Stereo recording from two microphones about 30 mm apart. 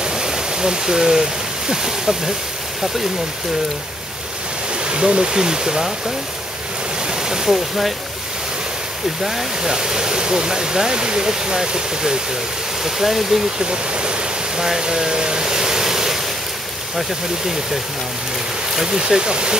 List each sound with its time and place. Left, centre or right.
0.0 s pink noise: right
1.7 s speech: centre
4.8 s speech: right
7.1 s ocean: right
7.4 s speech: centre
9.6 s speech: right
12.8 s speech: centre
13.6 s speech: right
14.6 s speech: centre
18.9 s speech: right